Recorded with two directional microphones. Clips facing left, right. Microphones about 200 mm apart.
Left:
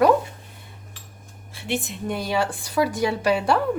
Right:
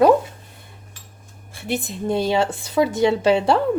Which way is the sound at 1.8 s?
30° right (ahead or behind).